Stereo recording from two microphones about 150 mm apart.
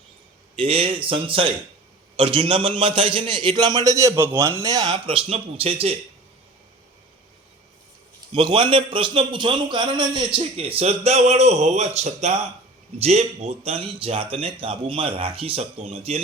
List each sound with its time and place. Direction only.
0.5 s a man's voice: 40° right (ahead or behind)
8.3 s a man's voice: 35° right (ahead or behind)